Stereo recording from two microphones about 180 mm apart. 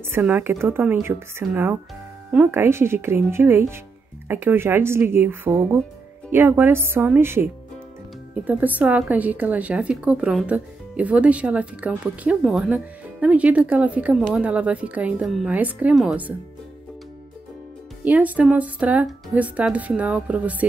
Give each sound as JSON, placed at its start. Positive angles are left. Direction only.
{"t": 0.1, "sound": "a woman's voice", "side_deg": -10}
{"t": 8.5, "sound": "a woman's voice", "side_deg": -10}
{"t": 18.0, "sound": "a woman's voice", "side_deg": -10}